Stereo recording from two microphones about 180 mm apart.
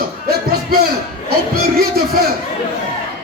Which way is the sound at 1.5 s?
60° right (ahead or behind).